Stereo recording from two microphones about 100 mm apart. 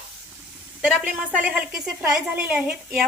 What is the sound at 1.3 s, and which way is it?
A woman's voice, 10° right (ahead or behind).